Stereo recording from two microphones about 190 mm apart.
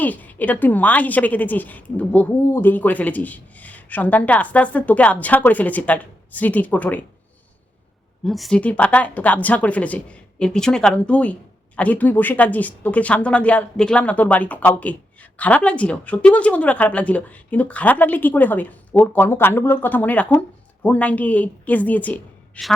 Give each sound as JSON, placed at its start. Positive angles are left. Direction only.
{"t": 0.0, "sound": "speech", "side_deg": 10}
{"t": 8.2, "sound": "speech", "side_deg": 0}